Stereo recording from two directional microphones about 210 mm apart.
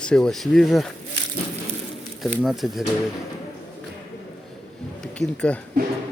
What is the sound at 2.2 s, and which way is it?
Speech, centre (ahead or behind).